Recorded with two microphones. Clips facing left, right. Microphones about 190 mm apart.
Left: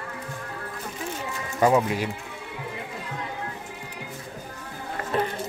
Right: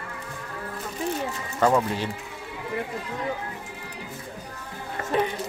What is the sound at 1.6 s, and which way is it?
Speech, 10° left (ahead or behind).